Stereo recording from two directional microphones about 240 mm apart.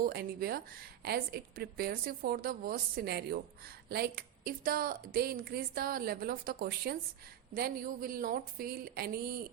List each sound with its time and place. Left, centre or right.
0.0 s a woman's voice: right